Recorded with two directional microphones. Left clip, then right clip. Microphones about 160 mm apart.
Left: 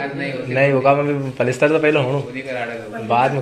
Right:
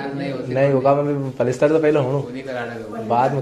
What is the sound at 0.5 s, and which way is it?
A man's voice, 10° right (ahead or behind).